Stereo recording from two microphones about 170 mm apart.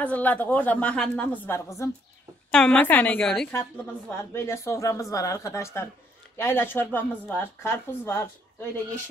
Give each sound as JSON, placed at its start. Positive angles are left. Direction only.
{"t": 0.0, "sound": "a woman's voice", "side_deg": 10}
{"t": 2.5, "sound": "a woman's voice", "side_deg": 5}
{"t": 3.5, "sound": "a woman's voice", "side_deg": 15}